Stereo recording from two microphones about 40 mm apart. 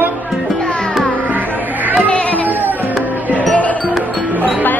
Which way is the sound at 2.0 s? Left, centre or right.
Left.